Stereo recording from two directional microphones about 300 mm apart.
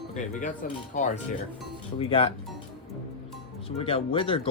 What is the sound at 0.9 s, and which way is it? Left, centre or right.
Speech, left.